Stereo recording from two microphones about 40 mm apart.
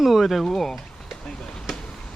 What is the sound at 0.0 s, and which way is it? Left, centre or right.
Speech, centre.